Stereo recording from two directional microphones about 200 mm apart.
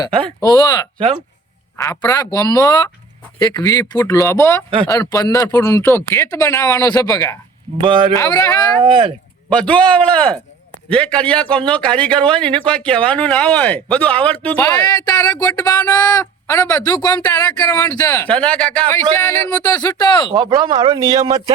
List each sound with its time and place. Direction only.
0.2 s speech: 5° left (ahead or behind)
0.4 s speech: 20° left (ahead or behind)
0.9 s speech: 25° right (ahead or behind)
1.8 s speech: 15° left (ahead or behind)
7.8 s speech: 25° right (ahead or behind)
8.1 s speech: 20° left (ahead or behind)
8.8 s speech: 25° right (ahead or behind)
9.5 s a man's voice: 5° left (ahead or behind)
14.8 s speech: 20° left (ahead or behind)
20.3 s speech: 20° right (ahead or behind)